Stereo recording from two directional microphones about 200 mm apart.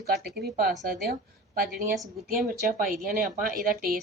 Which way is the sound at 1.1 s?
45° right (ahead or behind).